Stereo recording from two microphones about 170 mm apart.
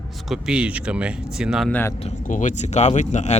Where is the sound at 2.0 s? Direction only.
45° left (ahead or behind).